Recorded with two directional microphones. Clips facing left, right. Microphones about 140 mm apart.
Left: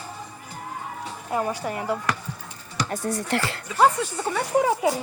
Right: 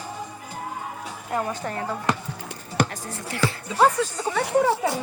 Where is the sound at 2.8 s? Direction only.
60° right (ahead or behind).